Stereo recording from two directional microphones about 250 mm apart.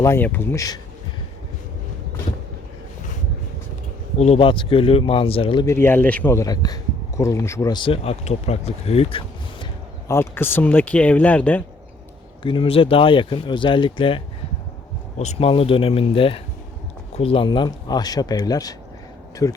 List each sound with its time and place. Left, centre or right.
0.0 s speech: centre
4.2 s speech: left
10.1 s speech: centre
12.4 s speech: centre
15.2 s speech: left